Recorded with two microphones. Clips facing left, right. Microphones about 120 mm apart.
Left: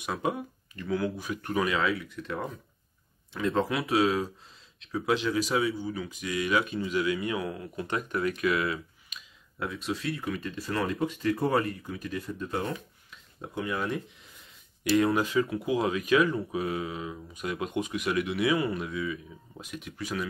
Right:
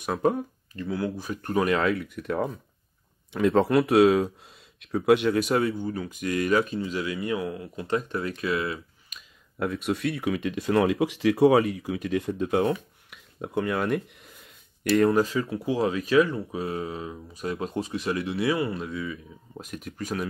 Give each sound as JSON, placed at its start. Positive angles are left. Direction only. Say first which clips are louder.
{"t": 0.0, "sound": "speech", "louder": "right 6 dB", "side_deg": -45}
{"t": 0.8, "sound": "speech", "louder": "even", "side_deg": -30}
{"t": 3.3, "sound": "speech", "louder": "right 7 dB", "side_deg": -65}
{"t": 9.1, "sound": "speech", "louder": "right 1 dB", "side_deg": -55}
{"t": 14.8, "sound": "speech", "louder": "right 3 dB", "side_deg": -50}
{"t": 15.0, "sound": "speech", "louder": "right 3 dB", "side_deg": -35}